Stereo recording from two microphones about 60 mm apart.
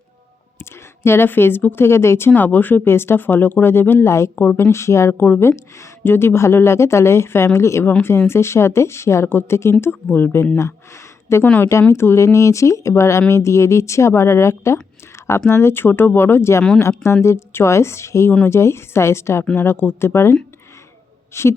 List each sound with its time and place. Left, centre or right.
0.6 s a sound: left
1.3 s speech: left
2.3 s speech: left
4.7 s speech: left
5.1 s speech: left
10.6 s speech: left
11.4 s speech: left
11.7 s speech: left